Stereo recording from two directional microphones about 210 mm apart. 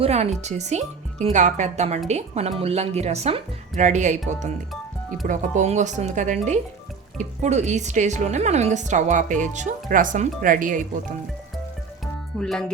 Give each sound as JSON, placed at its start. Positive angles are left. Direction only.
{"t": 0.0, "sound": "speech", "side_deg": -30}
{"t": 5.2, "sound": "speech", "side_deg": -35}
{"t": 12.4, "sound": "speech", "side_deg": 5}